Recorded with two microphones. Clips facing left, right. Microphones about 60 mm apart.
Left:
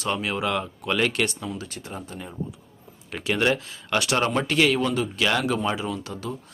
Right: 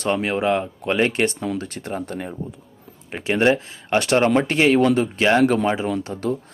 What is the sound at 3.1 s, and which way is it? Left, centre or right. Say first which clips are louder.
Speech: right 5 dB; right.